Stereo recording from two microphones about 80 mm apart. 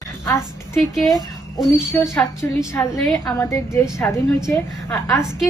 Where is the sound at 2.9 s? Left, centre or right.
Centre.